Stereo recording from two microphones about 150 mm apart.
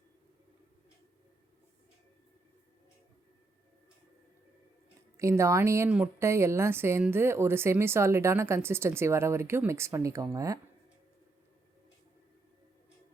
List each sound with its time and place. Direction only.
5.1 s speech: 20° right (ahead or behind)